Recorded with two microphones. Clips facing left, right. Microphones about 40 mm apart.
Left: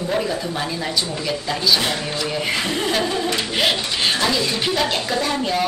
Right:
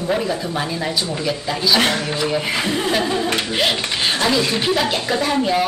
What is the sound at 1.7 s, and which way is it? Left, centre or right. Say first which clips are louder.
Speech: right 4 dB; right.